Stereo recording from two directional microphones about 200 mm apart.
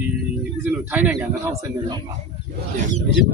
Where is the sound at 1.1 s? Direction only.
20° right (ahead or behind).